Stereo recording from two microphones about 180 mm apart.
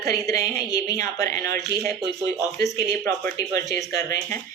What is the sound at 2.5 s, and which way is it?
A woman's voice, 15° left (ahead or behind).